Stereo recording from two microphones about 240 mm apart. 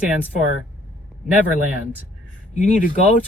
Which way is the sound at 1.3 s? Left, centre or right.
Centre.